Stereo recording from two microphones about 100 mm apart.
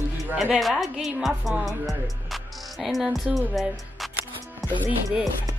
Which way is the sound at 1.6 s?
Centre (ahead or behind).